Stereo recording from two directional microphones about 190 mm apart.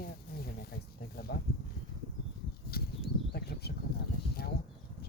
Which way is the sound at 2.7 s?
55° left (ahead or behind).